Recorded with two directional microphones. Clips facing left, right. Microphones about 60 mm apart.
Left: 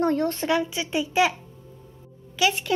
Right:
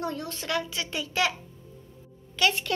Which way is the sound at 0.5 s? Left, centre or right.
Centre.